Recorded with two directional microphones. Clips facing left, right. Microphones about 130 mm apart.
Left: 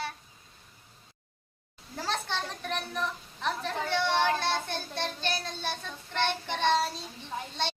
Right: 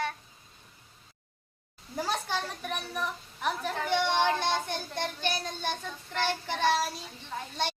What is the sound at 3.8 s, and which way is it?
Speech, 15° right (ahead or behind).